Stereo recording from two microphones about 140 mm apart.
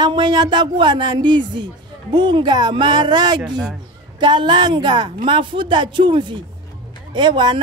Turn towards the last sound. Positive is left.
turn(degrees=-35)  # may be behind; listen again after turning